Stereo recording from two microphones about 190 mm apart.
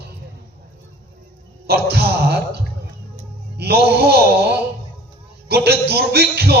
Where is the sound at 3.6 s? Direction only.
60° right (ahead or behind).